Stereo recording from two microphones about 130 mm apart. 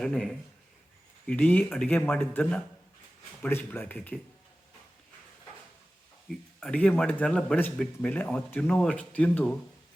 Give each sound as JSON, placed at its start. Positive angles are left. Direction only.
{"t": 0.0, "sound": "speech", "side_deg": 5}
{"t": 6.2, "sound": "speech", "side_deg": 5}